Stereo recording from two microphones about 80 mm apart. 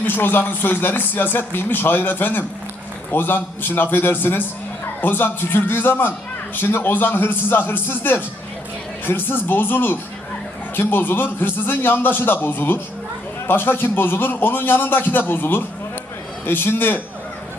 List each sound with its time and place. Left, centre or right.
0.0 s speech: left